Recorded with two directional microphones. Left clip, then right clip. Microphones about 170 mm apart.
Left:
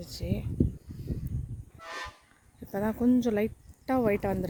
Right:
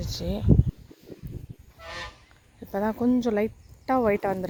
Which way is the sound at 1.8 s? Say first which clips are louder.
Right 2 dB; 40° left (ahead or behind).